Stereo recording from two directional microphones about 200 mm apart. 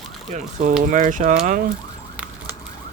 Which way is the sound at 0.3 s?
35° right (ahead or behind).